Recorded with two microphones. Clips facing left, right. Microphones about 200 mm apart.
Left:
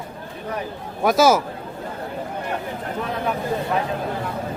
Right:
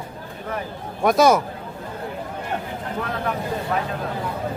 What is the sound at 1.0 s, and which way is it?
Speech, centre (ahead or behind).